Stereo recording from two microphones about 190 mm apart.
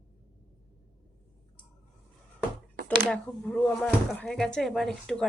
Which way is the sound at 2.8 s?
5° left (ahead or behind).